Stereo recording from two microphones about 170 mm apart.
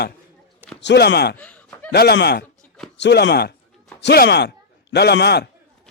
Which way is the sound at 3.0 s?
85° left.